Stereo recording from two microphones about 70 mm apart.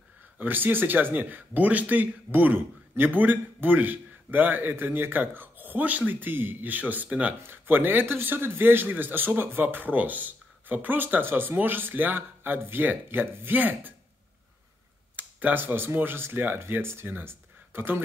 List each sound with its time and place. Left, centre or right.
0.4 s speech: right
15.1 s speech: right